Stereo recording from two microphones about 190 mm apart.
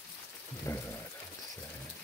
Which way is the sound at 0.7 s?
15° left (ahead or behind).